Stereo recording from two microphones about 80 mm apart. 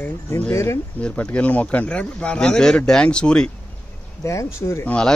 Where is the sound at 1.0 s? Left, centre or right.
Centre.